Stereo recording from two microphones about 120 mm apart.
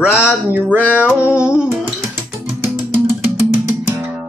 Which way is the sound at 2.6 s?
20° right (ahead or behind).